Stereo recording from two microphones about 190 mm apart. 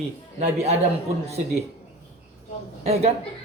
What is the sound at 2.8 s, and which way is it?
Speech, 35° right (ahead or behind).